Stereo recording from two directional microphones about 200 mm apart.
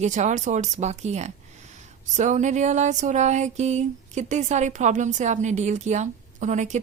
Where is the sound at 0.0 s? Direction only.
35° right (ahead or behind).